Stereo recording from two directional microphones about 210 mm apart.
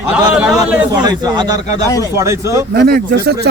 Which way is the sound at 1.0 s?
20° right (ahead or behind).